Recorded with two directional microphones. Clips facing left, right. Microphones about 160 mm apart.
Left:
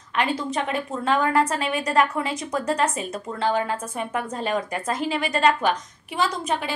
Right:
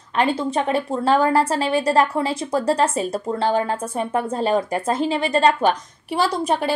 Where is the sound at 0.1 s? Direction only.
30° right (ahead or behind).